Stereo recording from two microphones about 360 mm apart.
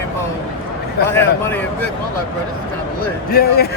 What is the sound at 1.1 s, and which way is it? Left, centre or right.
Speech, centre.